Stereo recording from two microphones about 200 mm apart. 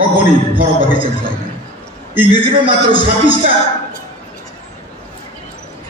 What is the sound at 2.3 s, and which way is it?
A man's voice, 25° right (ahead or behind).